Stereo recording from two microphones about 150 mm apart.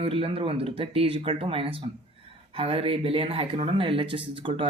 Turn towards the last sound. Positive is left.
turn(degrees=-35)  # may be behind; listen again after turning